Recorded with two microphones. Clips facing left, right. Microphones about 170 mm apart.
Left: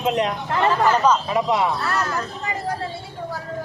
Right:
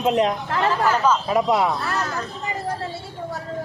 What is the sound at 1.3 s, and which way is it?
Speech, 50° right (ahead or behind).